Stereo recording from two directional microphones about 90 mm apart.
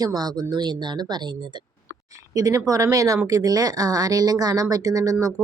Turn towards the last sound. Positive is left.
turn(degrees=-40)  # may be behind; listen again after turning